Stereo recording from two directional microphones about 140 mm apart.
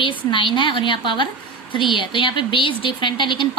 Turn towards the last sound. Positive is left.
turn(degrees=35)  # may be behind; listen again after turning